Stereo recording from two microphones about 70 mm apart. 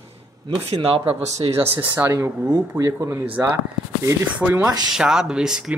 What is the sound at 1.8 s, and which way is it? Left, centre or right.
Speech, right.